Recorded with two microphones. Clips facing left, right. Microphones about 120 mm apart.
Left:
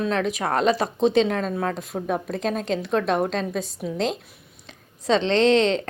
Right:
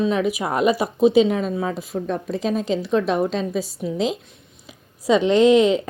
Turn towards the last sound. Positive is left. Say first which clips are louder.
# right 4 dB
turn(degrees=-10)  # may be behind; listen again after turning